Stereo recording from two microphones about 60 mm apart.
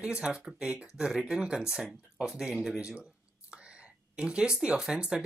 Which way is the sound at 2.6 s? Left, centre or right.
Centre.